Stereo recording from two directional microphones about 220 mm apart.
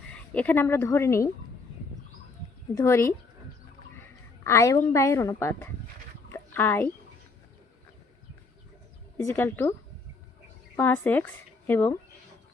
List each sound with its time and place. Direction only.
0.1 s a woman's voice: 5° left (ahead or behind)
2.7 s a woman's voice: 10° left (ahead or behind)
4.4 s a woman's voice: 15° left (ahead or behind)
6.3 s a sound: 10° left (ahead or behind)
9.1 s a woman's voice: 10° left (ahead or behind)
10.8 s speech: 10° left (ahead or behind)